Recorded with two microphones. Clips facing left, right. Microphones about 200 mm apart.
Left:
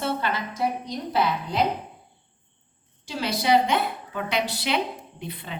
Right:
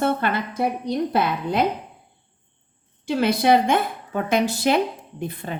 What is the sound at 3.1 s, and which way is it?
A woman's voice, 55° right (ahead or behind).